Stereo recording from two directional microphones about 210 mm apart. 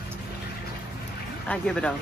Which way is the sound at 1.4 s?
5° left (ahead or behind).